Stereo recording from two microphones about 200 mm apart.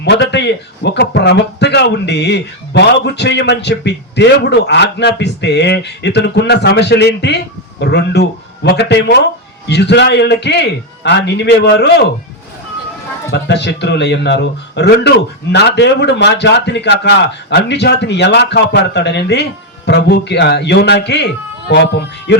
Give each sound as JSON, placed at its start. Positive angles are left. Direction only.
{"t": 0.0, "sound": "a man's voice", "side_deg": 60}
{"t": 13.3, "sound": "a man's voice", "side_deg": 55}